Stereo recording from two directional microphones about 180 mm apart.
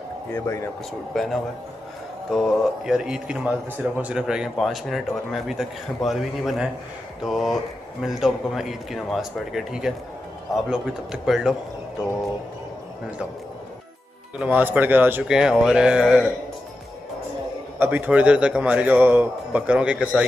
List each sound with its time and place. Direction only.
0.3 s speech: 15° left (ahead or behind)
1.1 s a man's voice: centre (ahead or behind)
14.4 s a man's voice: 10° right (ahead or behind)
17.7 s a man's voice: 10° right (ahead or behind)